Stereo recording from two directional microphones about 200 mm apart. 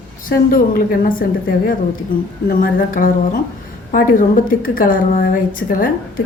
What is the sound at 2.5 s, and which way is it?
A woman's voice, 45° left (ahead or behind).